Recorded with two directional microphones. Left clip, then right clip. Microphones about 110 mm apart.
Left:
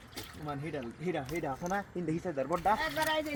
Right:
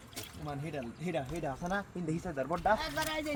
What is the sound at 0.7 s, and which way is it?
Speech, 45° right (ahead or behind).